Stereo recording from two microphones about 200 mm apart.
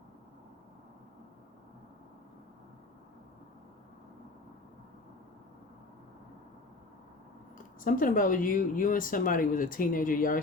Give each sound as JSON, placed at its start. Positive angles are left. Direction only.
{"t": 7.8, "sound": "speech", "side_deg": 40}